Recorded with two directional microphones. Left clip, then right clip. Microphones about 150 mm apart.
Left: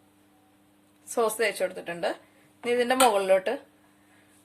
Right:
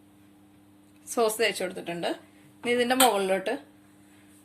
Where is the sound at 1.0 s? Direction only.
25° left (ahead or behind).